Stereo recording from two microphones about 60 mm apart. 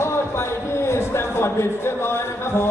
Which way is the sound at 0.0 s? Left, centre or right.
Left.